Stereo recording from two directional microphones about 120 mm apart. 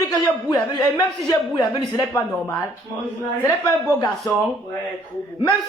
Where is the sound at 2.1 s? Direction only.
25° left (ahead or behind).